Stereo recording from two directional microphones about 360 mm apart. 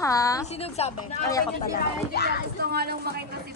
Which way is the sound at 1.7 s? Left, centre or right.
Left.